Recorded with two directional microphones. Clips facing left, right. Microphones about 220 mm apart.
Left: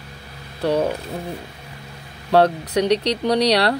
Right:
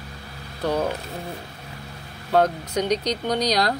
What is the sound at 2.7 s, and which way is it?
Speech, 30° left (ahead or behind).